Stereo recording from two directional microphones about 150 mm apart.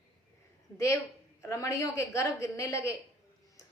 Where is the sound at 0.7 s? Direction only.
20° left (ahead or behind).